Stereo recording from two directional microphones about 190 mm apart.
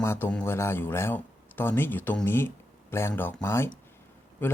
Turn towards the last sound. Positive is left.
turn(degrees=10)  # may be behind; listen again after turning